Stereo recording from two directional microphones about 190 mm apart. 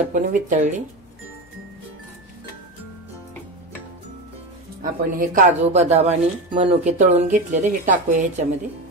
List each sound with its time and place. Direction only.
0.1 s a woman's voice: 45° right (ahead or behind)
4.8 s a woman's voice: 45° right (ahead or behind)